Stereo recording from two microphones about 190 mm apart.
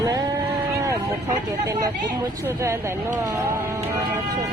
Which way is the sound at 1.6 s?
20° right (ahead or behind).